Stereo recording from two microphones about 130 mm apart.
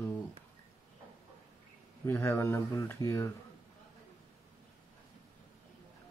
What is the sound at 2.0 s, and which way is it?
Speech, 20° left (ahead or behind).